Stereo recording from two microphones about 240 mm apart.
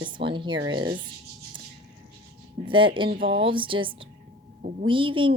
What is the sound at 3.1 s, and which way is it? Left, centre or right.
Speech, right.